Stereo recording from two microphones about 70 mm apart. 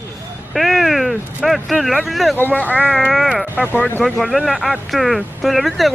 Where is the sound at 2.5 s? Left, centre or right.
Left.